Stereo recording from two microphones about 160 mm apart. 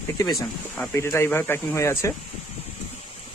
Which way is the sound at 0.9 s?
15° left (ahead or behind).